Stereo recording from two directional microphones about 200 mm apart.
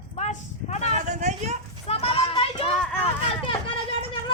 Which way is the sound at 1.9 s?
30° left (ahead or behind).